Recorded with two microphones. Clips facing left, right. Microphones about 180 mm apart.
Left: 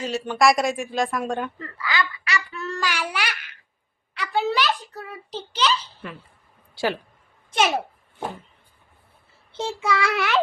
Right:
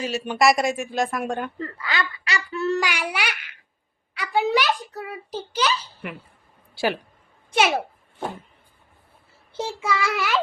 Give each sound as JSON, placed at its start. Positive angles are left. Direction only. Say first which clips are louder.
{"t": 0.0, "sound": "speech", "louder": "even", "side_deg": -10}
{"t": 1.5, "sound": "speech", "louder": "left 1 dB", "side_deg": -30}
{"t": 2.8, "sound": "a child's voice", "louder": "even", "side_deg": -15}
{"t": 9.5, "sound": "speech", "louder": "left 1 dB", "side_deg": -10}